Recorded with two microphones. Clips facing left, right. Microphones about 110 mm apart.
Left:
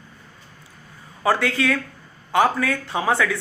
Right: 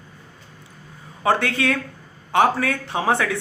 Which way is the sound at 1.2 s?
25° right (ahead or behind).